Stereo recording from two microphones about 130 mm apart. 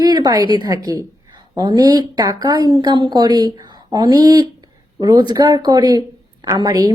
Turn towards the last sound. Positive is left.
turn(degrees=-30)  # may be behind; listen again after turning